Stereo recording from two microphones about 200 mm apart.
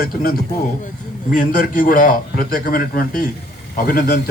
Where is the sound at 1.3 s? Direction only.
40° left (ahead or behind).